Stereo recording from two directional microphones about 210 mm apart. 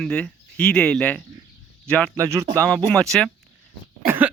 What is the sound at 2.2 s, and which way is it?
Speech, 15° right (ahead or behind).